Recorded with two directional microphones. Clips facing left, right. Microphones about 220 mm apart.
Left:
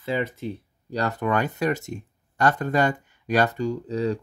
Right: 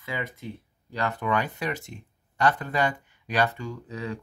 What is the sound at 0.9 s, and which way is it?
Speech, 40° left (ahead or behind).